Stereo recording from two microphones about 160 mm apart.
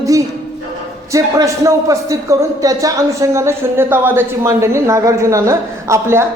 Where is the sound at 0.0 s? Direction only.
20° right (ahead or behind).